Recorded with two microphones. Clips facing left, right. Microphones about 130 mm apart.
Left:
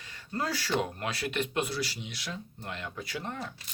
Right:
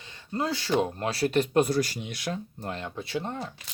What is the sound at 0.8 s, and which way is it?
Speech, 30° right (ahead or behind).